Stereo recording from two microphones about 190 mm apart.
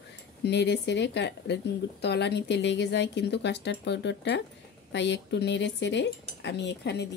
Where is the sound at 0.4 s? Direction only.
65° left (ahead or behind).